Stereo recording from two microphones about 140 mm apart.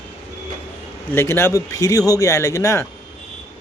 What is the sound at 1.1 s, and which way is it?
A man's voice, 15° left (ahead or behind).